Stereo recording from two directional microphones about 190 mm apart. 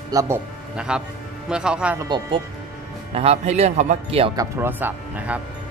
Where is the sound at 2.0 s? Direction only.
20° right (ahead or behind).